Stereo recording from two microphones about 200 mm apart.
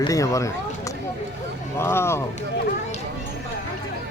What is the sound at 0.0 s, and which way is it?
Speech, 15° left (ahead or behind).